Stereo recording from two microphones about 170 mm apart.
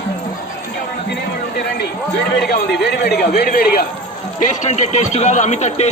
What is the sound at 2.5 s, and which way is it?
Speech, 75° left (ahead or behind).